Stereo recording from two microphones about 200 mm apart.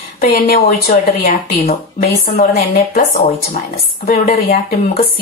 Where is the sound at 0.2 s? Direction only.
50° left (ahead or behind).